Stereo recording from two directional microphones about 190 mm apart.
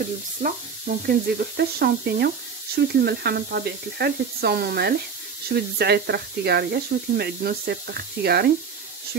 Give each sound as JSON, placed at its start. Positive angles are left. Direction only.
{"t": 0.4, "sound": "speech", "side_deg": -50}